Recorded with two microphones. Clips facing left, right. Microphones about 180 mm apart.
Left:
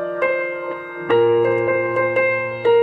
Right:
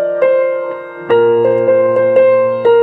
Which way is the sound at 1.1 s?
50° right (ahead or behind).